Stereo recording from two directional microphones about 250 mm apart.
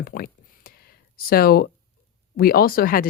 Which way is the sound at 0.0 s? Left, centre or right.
Left.